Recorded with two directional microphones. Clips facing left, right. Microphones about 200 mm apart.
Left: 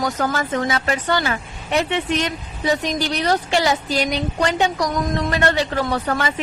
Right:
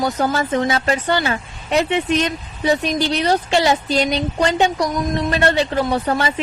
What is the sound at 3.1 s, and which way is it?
Speech, 20° right (ahead or behind).